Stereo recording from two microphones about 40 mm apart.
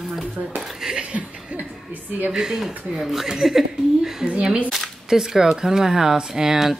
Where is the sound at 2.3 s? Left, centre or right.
Centre.